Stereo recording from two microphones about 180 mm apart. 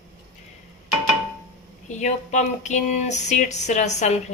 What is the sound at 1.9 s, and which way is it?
Speech, 40° left (ahead or behind).